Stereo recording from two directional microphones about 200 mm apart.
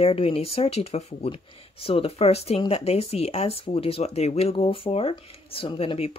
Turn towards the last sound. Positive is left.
turn(degrees=30)  # may be behind; listen again after turning